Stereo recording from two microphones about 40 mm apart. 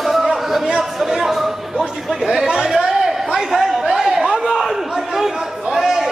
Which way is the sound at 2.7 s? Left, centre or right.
Centre.